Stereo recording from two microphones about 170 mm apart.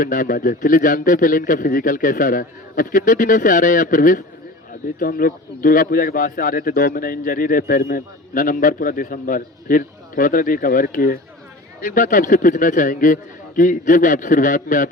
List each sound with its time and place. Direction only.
0.0 s a man's voice: 55° left (ahead or behind)